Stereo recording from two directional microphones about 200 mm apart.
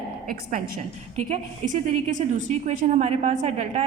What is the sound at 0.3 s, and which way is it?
Speech, 45° right (ahead or behind).